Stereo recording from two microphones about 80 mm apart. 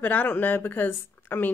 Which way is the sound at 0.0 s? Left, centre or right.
Left.